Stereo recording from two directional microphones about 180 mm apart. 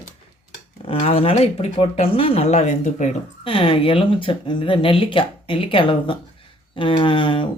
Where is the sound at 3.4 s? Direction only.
30° left (ahead or behind).